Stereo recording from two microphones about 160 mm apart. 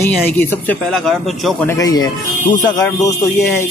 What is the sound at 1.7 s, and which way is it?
Speech, 25° left (ahead or behind).